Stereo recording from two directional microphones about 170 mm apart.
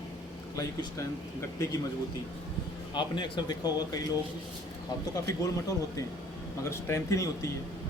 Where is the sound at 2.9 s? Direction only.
25° left (ahead or behind).